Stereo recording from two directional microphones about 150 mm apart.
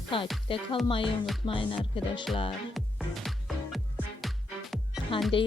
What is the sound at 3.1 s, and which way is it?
Music, centre (ahead or behind).